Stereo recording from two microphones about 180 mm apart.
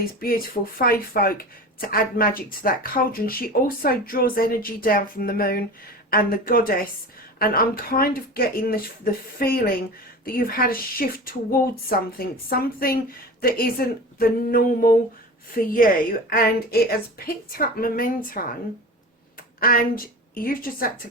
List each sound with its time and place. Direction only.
0.0 s a woman's voice: 55° left (ahead or behind)
19.5 s a woman's voice: 55° left (ahead or behind)